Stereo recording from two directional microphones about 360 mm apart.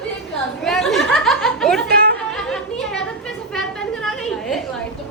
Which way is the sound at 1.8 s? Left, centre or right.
Right.